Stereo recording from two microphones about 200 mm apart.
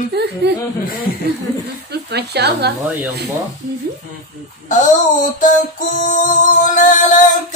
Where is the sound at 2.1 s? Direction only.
55° right (ahead or behind).